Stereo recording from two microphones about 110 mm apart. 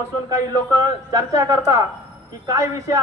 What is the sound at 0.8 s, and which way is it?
A man's voice, 35° right (ahead or behind).